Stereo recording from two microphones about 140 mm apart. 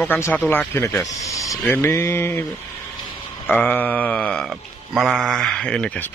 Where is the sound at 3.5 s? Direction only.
10° left (ahead or behind).